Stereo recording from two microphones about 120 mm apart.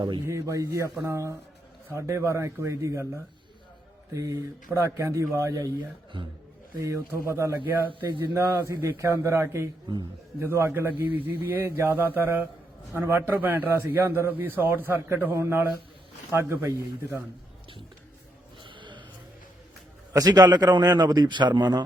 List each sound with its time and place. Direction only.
0.3 s speech: 25° right (ahead or behind)
6.7 s speech: 25° right (ahead or behind)
9.8 s a man's voice: 35° right (ahead or behind)
10.4 s speech: 20° right (ahead or behind)
18.6 s a sound: 40° right (ahead or behind)
20.1 s a man's voice: 30° right (ahead or behind)